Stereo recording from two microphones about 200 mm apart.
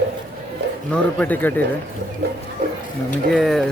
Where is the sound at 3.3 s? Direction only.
Centre (ahead or behind).